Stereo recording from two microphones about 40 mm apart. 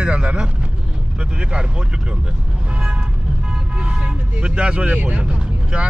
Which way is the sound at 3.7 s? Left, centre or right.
Right.